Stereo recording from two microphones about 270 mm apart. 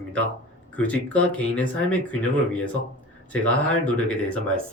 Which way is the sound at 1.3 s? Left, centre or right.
Centre.